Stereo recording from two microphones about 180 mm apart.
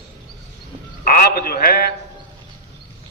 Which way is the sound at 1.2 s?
55° left (ahead or behind).